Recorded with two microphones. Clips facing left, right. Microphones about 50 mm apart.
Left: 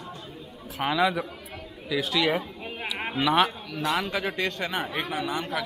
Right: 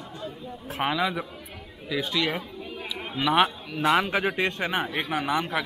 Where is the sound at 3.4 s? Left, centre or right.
Right.